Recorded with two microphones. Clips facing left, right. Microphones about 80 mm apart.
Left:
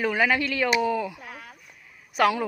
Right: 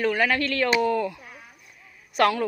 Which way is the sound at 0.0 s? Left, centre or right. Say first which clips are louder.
Even; centre.